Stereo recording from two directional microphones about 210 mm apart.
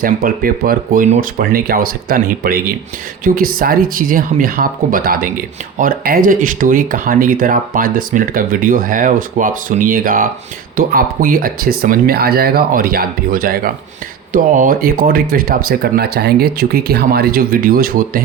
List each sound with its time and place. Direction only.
0.0 s speech: 45° right (ahead or behind)